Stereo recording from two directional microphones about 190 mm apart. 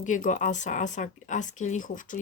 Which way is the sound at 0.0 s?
40° left (ahead or behind).